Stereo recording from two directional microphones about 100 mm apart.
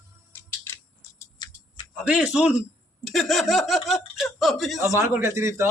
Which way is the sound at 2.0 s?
10° right (ahead or behind).